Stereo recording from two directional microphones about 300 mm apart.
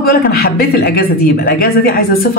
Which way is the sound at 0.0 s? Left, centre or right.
Left.